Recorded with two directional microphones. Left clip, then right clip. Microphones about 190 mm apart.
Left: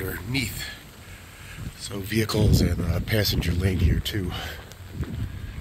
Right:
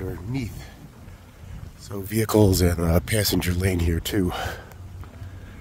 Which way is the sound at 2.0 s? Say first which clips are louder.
Right 6 dB; 65° right (ahead or behind).